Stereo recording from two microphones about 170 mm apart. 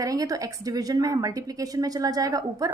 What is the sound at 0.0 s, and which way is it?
A woman's voice, 20° right (ahead or behind).